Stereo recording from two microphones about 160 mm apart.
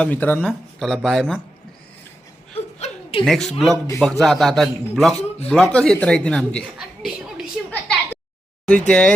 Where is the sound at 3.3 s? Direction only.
Centre (ahead or behind).